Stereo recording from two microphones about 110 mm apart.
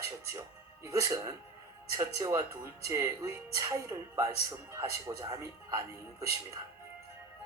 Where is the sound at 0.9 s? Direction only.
35° right (ahead or behind).